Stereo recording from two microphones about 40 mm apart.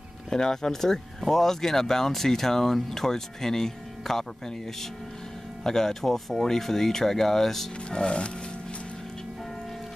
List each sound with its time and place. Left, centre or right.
0.3 s speech: centre
5.6 s speech: centre